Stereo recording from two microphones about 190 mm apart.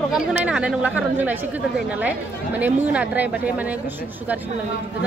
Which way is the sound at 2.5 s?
10° right (ahead or behind).